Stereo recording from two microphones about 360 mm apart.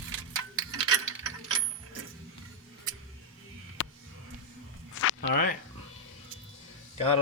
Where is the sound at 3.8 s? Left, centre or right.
Left.